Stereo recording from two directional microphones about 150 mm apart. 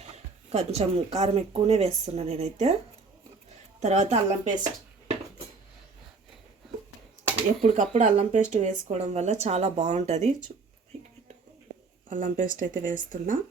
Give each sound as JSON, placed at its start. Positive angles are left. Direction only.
{"t": 0.5, "sound": "speech", "side_deg": -45}
{"t": 3.8, "sound": "speech", "side_deg": -50}
{"t": 7.7, "sound": "speech", "side_deg": -55}
{"t": 12.0, "sound": "speech", "side_deg": -60}